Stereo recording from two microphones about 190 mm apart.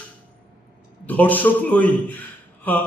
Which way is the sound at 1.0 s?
10° left (ahead or behind).